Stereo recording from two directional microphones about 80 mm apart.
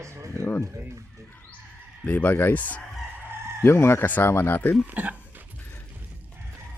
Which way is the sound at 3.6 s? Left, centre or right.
Left.